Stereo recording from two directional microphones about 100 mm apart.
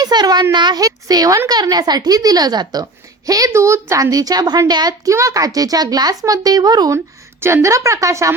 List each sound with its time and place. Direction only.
0.0 s a sound: 40° right (ahead or behind)
0.5 s speech: 50° right (ahead or behind)
0.8 s speech: 35° right (ahead or behind)
7.4 s speech: 30° right (ahead or behind)